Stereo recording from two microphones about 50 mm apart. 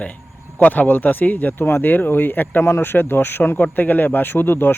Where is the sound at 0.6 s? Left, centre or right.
Left.